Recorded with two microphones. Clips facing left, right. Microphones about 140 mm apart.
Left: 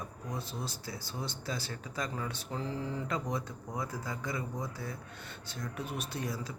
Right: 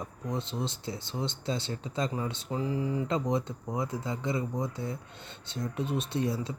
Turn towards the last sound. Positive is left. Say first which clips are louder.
# right 7 dB
turn(degrees=-25)  # may be behind; listen again after turning